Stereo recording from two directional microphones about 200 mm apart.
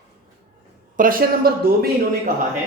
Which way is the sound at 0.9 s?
45° right (ahead or behind).